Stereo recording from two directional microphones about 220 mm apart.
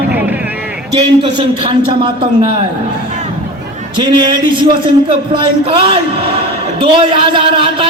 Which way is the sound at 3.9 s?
20° right (ahead or behind).